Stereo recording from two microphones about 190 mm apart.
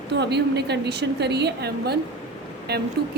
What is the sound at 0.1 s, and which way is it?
A woman's voice, 65° right (ahead or behind).